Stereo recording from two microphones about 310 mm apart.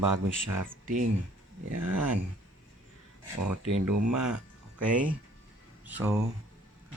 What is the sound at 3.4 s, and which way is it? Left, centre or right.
Speech, right.